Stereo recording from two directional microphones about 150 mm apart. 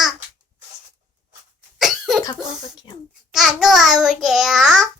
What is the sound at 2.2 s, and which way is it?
Speech, 25° left (ahead or behind).